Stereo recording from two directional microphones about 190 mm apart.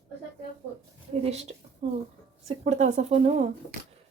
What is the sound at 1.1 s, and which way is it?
A woman's voice, 35° right (ahead or behind).